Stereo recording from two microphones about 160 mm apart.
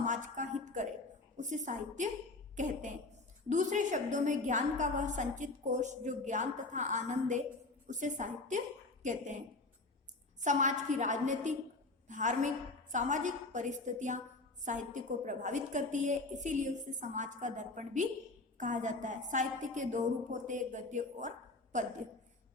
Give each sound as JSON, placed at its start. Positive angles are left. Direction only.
{"t": 0.0, "sound": "a sound", "side_deg": -50}
{"t": 2.6, "sound": "a woman's voice", "side_deg": -50}
{"t": 10.4, "sound": "a woman's voice", "side_deg": -50}